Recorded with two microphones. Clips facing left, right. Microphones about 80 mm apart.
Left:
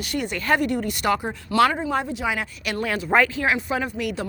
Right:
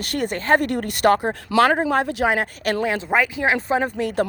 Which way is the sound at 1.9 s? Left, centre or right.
Right.